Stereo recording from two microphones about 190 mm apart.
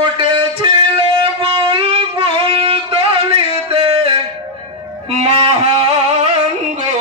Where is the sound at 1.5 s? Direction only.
30° right (ahead or behind).